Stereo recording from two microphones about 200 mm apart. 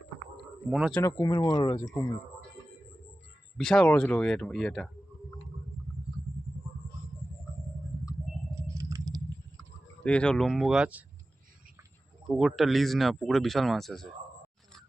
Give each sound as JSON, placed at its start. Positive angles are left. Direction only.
{"t": 0.7, "sound": "speech", "side_deg": 0}
{"t": 1.0, "sound": "speech", "side_deg": 15}
{"t": 3.6, "sound": "speech", "side_deg": 5}
{"t": 8.6, "sound": "patter", "side_deg": -15}
{"t": 10.0, "sound": "speech", "side_deg": 5}
{"t": 12.4, "sound": "speech", "side_deg": 0}